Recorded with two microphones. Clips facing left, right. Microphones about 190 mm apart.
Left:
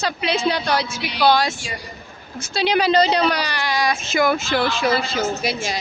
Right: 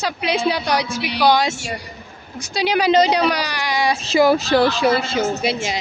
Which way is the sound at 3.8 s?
30° right (ahead or behind).